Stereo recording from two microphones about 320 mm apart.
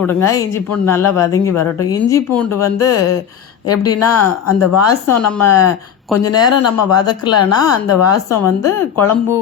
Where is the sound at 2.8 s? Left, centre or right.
Left.